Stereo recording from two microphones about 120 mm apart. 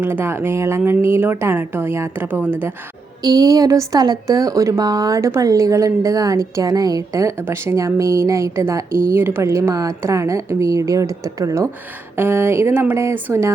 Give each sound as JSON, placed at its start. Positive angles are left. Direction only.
{"t": 0.0, "sound": "speech", "side_deg": -20}
{"t": 3.2, "sound": "speech", "side_deg": -30}